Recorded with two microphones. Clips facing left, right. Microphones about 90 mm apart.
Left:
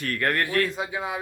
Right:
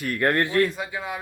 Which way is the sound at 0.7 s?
20° left (ahead or behind).